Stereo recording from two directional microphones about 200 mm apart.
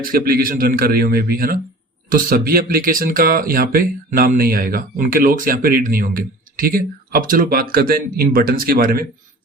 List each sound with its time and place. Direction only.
0.0 s speech: 45° right (ahead or behind)